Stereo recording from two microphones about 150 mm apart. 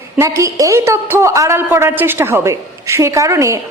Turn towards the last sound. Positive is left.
turn(degrees=-20)  # may be behind; listen again after turning